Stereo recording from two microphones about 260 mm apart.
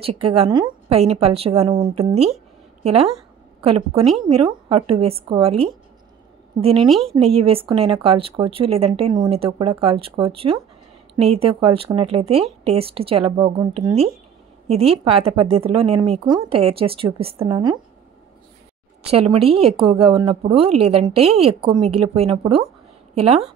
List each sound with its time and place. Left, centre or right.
0.0 s a woman's voice: right
6.9 s speech: centre
7.2 s a woman's voice: right
19.0 s a woman's voice: right